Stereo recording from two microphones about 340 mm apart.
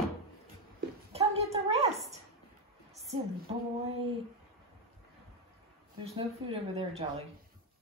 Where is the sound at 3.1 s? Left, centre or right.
Centre.